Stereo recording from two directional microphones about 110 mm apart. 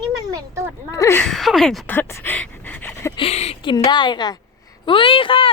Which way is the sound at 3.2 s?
70° left (ahead or behind).